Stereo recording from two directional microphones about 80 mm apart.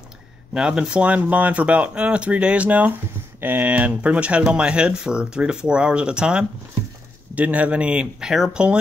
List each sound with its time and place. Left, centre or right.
0.6 s speech: centre